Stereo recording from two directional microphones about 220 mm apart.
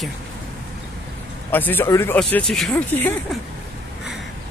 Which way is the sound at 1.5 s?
10° left (ahead or behind).